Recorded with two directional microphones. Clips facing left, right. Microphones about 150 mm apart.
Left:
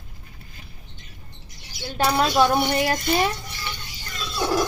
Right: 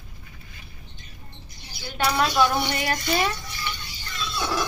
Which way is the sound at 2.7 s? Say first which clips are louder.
Left 4 dB; 30° left (ahead or behind).